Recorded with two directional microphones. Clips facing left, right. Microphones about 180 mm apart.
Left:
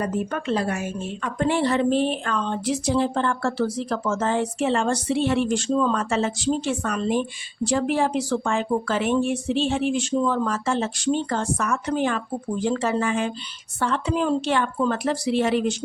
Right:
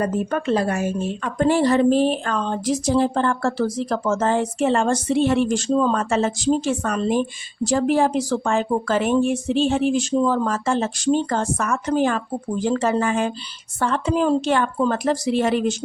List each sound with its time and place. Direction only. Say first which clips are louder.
0.0 s a woman's voice: right 4 dB; 40° right (ahead or behind)